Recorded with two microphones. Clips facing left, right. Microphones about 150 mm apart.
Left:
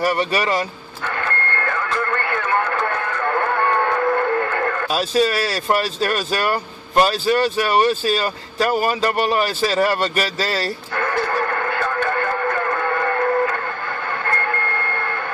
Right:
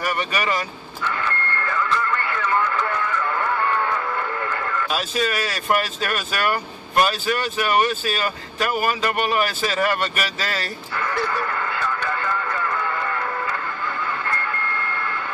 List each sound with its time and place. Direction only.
0.0 s speech: 35° left (ahead or behind)
1.0 s radio: 55° left (ahead or behind)
4.8 s speech: 35° left (ahead or behind)
11.0 s radio: 50° left (ahead or behind)